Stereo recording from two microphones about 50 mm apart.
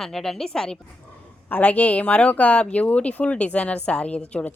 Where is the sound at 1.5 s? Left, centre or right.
Left.